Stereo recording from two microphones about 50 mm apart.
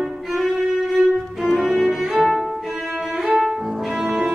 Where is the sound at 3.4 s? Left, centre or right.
Centre.